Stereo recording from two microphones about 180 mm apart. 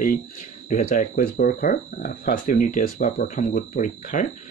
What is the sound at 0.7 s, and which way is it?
Speech, 50° left (ahead or behind).